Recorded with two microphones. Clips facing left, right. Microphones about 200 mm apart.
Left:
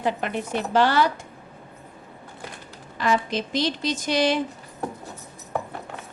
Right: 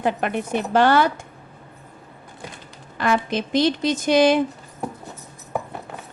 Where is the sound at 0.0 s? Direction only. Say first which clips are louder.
Right 3 dB; 55° right (ahead or behind).